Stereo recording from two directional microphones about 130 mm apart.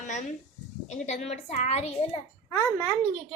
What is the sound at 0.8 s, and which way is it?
Speech, 60° left (ahead or behind).